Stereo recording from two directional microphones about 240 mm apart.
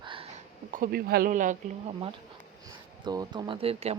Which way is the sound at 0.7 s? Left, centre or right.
Right.